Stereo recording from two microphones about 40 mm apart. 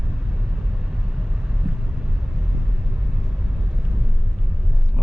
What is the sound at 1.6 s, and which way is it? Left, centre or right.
Vehicle, right.